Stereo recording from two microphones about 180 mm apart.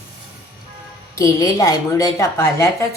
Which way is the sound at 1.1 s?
20° left (ahead or behind).